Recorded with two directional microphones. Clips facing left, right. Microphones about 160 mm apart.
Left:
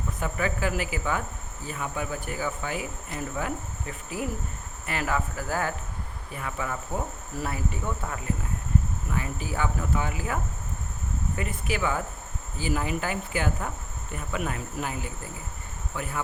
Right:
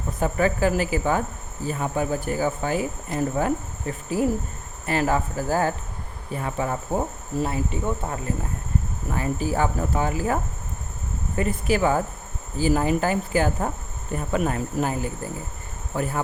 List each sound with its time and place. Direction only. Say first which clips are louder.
0.2 s speech: right 8 dB; 35° right (ahead or behind)